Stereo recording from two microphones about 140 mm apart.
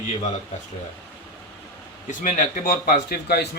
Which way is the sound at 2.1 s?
60° left (ahead or behind).